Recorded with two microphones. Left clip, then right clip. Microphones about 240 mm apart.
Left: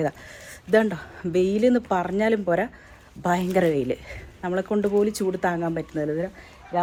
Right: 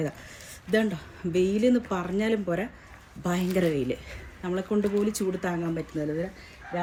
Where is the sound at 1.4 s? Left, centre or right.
Centre.